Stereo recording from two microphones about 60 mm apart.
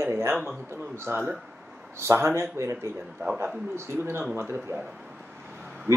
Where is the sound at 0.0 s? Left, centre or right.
Right.